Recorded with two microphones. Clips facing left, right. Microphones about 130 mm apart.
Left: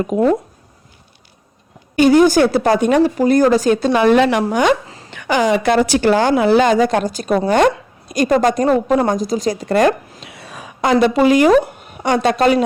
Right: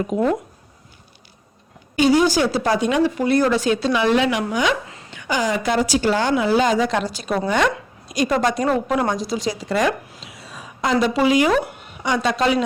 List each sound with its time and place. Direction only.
0.1 s speech: 55° left (ahead or behind)
2.0 s a woman's voice: 55° left (ahead or behind)
5.1 s speech: 65° left (ahead or behind)
6.3 s a woman's voice: 60° left (ahead or behind)
8.6 s a woman's voice: 35° left (ahead or behind); by 12.6 s 55° left (ahead or behind)